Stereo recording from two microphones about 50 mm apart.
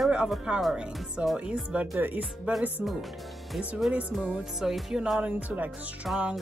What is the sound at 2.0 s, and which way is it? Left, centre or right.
Speech, right.